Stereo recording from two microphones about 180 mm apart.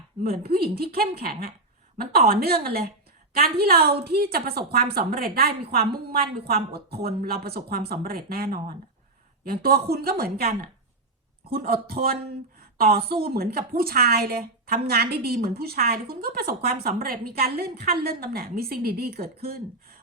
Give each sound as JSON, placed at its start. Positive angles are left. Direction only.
{"t": 0.2, "sound": "a woman's voice", "side_deg": -60}